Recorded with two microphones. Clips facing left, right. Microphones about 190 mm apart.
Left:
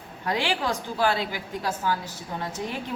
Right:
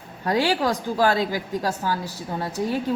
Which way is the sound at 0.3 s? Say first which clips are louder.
Right 5 dB; 40° right (ahead or behind).